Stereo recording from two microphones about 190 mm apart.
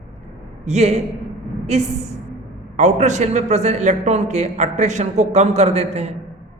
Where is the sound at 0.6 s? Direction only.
35° right (ahead or behind).